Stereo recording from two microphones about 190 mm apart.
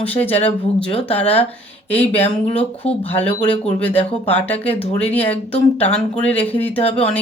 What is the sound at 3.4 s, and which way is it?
Speech, 10° left (ahead or behind).